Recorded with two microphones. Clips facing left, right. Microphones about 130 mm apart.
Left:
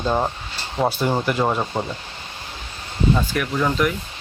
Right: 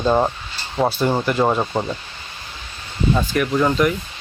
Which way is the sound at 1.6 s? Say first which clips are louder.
Right 3 dB; 15° right (ahead or behind).